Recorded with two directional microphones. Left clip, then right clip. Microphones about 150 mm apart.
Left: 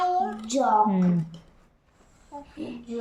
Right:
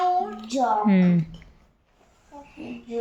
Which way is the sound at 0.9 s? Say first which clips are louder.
Right 4 dB; 20° right (ahead or behind).